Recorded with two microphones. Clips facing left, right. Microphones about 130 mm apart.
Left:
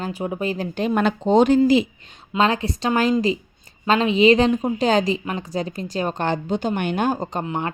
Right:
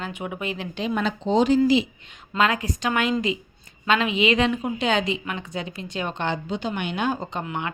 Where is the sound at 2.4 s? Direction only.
30° left (ahead or behind).